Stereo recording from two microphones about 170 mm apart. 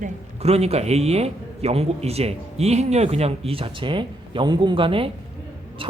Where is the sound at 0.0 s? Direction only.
40° right (ahead or behind).